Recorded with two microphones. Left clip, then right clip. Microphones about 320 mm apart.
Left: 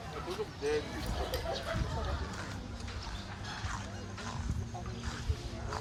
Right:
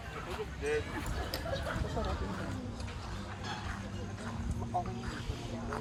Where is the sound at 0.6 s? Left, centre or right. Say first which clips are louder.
Left 1 dB; left.